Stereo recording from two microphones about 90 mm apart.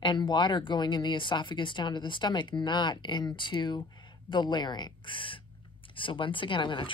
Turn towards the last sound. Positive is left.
turn(degrees=65)  # may be behind; listen again after turning